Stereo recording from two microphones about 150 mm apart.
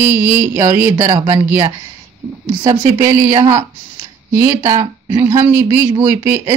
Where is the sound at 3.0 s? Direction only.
20° right (ahead or behind).